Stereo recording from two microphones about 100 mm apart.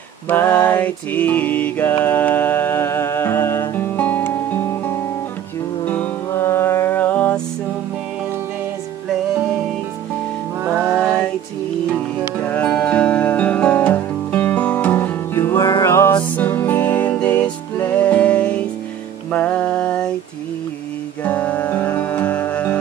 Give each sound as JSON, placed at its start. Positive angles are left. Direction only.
{"t": 0.3, "sound": "mantra", "side_deg": 20}
{"t": 5.9, "sound": "music", "side_deg": 20}
{"t": 10.8, "sound": "music", "side_deg": 0}
{"t": 12.4, "sound": "music", "side_deg": 15}
{"t": 21.2, "sound": "music", "side_deg": 15}